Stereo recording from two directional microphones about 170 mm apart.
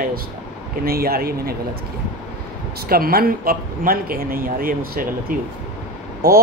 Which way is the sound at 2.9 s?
60° right (ahead or behind).